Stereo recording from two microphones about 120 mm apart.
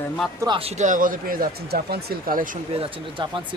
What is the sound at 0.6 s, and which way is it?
Speech, 70° right (ahead or behind).